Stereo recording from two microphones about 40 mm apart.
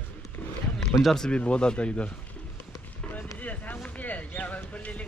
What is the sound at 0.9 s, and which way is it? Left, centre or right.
Speech, left.